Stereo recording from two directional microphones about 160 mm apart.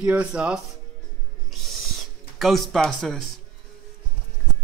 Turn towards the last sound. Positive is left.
turn(degrees=0)  # may be behind; listen again after turning